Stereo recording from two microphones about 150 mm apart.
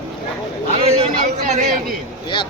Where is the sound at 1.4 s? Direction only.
55° right (ahead or behind).